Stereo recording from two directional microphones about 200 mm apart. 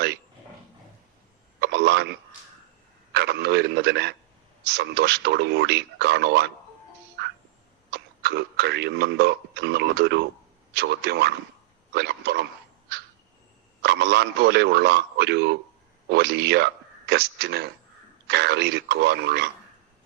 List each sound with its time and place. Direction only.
1.6 s a sound: 55° right (ahead or behind)
3.1 s radio: 55° right (ahead or behind)
4.7 s speech: 55° right (ahead or behind)
7.2 s music: 55° right (ahead or behind)
7.9 s speech: 55° right (ahead or behind)
13.8 s speech: 55° right (ahead or behind)